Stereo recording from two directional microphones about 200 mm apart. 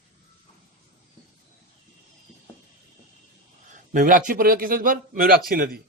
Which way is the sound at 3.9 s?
40° right (ahead or behind).